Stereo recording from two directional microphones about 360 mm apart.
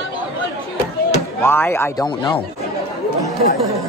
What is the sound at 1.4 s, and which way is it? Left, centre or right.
Speech, centre.